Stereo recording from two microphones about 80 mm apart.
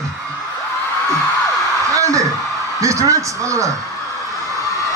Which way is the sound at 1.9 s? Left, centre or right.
Right.